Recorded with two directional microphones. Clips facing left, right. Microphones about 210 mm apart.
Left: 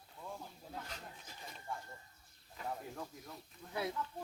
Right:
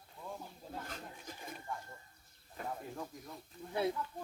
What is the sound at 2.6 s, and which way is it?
Snake, 50° right (ahead or behind).